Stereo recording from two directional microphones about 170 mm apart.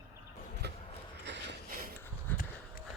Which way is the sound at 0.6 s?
75° right (ahead or behind).